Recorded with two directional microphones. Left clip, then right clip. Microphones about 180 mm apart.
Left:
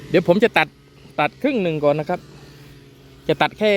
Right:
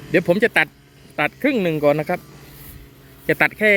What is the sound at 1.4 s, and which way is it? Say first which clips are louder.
Speech: right 3 dB; 5° right (ahead or behind).